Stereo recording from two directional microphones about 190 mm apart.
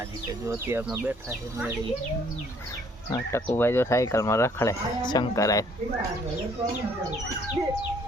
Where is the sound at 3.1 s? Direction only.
15° left (ahead or behind).